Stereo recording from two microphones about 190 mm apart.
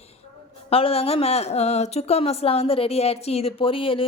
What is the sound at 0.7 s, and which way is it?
Speech, 30° left (ahead or behind).